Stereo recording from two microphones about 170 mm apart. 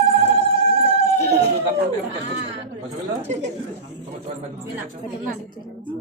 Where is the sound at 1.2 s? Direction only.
75° right (ahead or behind).